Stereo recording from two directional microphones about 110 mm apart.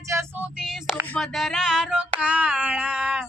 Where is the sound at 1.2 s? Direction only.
5° right (ahead or behind).